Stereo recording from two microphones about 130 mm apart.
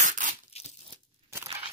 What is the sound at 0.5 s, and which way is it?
Tearing, 50° left (ahead or behind).